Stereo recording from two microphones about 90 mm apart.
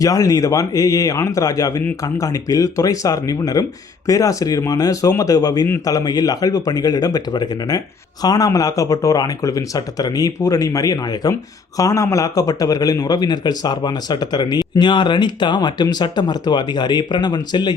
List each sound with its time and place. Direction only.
0.0 s a man's voice: 40° left (ahead or behind)